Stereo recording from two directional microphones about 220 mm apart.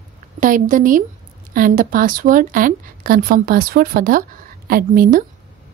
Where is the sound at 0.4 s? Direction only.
35° right (ahead or behind).